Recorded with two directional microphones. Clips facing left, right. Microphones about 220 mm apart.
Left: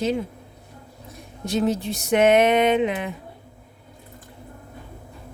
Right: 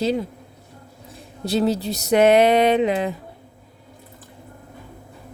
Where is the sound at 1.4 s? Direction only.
35° right (ahead or behind).